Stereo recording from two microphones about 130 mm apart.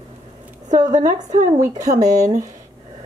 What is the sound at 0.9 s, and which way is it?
Speech, 70° right (ahead or behind).